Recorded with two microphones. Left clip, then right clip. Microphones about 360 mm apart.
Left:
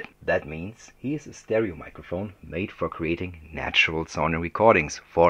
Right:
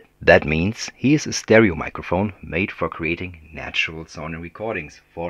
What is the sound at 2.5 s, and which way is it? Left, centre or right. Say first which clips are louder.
Speech: right 5 dB; centre.